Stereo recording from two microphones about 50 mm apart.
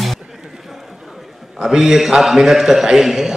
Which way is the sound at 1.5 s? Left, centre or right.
Centre.